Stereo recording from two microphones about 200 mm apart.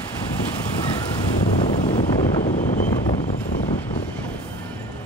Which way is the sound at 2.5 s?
35° left (ahead or behind).